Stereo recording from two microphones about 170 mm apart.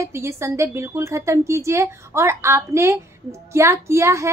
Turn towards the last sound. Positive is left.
turn(degrees=-15)  # may be behind; listen again after turning